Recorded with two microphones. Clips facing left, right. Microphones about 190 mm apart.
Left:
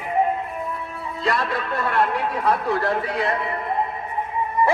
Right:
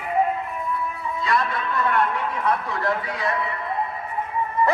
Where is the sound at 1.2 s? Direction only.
70° left (ahead or behind).